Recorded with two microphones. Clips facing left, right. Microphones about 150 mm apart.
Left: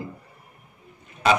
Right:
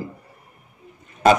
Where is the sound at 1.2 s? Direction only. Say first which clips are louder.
Right 5 dB; 45° right (ahead or behind).